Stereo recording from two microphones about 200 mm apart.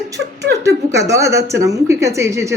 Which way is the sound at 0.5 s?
15° right (ahead or behind).